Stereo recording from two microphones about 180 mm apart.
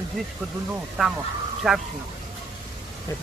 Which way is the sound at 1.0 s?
5° right (ahead or behind).